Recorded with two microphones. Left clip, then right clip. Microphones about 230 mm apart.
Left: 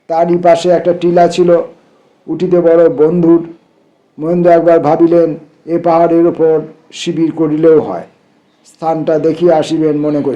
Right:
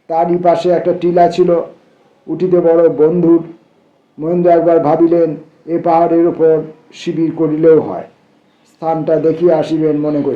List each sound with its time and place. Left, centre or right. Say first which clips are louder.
0.1 s a man's voice: left 3 dB; left